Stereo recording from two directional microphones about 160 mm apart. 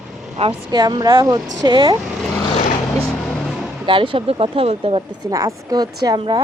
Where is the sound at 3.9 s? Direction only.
30° right (ahead or behind).